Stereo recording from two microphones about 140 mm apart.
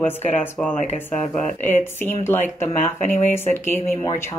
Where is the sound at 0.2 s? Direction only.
50° left (ahead or behind).